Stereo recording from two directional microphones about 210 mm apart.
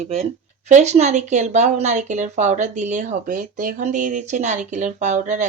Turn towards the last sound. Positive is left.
turn(degrees=-35)  # may be behind; listen again after turning